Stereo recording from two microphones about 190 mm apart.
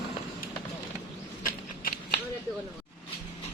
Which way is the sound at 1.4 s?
50° left (ahead or behind).